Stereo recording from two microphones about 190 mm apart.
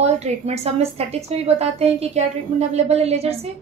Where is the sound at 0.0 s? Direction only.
35° right (ahead or behind).